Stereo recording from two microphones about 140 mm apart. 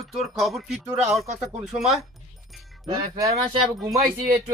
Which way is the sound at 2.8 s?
25° right (ahead or behind).